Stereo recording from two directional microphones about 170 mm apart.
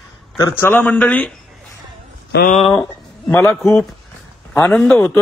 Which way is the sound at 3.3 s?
10° left (ahead or behind).